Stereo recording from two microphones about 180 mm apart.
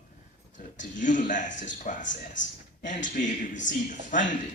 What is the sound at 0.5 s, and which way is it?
A man's voice, 45° left (ahead or behind).